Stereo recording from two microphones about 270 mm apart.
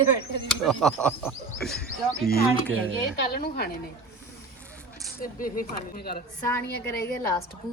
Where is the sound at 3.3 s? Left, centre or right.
Left.